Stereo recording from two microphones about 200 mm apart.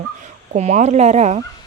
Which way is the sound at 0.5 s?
35° right (ahead or behind).